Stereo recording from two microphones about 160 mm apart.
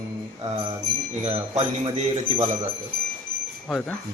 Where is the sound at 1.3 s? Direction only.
45° right (ahead or behind).